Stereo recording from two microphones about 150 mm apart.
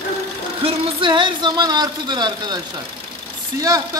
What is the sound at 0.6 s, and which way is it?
Speech, 30° right (ahead or behind).